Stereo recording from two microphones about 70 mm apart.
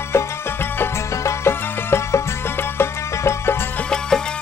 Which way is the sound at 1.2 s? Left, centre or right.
Left.